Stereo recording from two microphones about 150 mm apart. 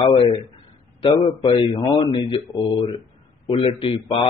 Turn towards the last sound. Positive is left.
turn(degrees=35)  # may be behind; listen again after turning